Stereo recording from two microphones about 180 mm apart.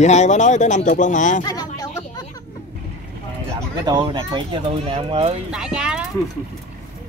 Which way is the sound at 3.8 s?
25° right (ahead or behind).